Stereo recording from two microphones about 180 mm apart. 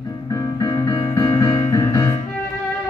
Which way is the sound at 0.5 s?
15° left (ahead or behind).